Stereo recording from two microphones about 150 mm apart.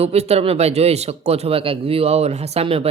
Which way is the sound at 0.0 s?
45° right (ahead or behind).